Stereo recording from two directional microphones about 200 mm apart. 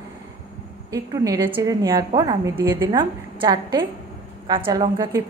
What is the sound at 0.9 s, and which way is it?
A woman's voice, 15° right (ahead or behind).